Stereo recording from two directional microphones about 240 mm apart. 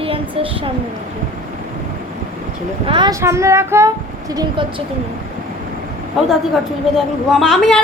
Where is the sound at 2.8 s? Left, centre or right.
Centre.